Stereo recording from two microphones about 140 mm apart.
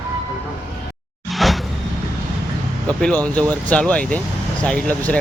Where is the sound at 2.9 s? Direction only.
5° left (ahead or behind).